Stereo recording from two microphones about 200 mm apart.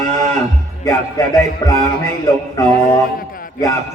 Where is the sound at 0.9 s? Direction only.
20° left (ahead or behind).